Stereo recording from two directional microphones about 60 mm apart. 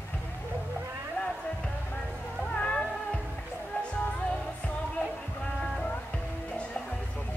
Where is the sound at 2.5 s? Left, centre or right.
Centre.